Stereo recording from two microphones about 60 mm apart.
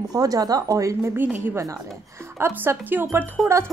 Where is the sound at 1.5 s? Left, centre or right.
Right.